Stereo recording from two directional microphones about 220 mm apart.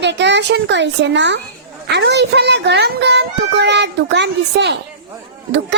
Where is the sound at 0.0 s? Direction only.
55° right (ahead or behind).